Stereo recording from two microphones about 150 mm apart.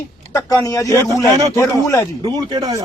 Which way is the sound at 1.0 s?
20° right (ahead or behind).